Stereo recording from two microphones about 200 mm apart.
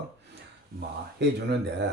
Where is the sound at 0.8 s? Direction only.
55° right (ahead or behind).